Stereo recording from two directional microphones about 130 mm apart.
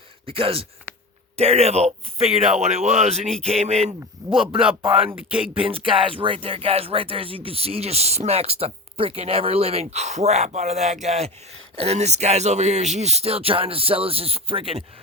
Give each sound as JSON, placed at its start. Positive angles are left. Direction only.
{"t": 0.3, "sound": "speech", "side_deg": -45}
{"t": 4.2, "sound": "a man's voice", "side_deg": -25}
{"t": 5.1, "sound": "speech", "side_deg": -10}
{"t": 5.6, "sound": "speech", "side_deg": -45}